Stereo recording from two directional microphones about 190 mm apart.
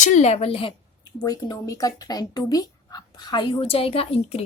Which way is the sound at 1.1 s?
20° left (ahead or behind).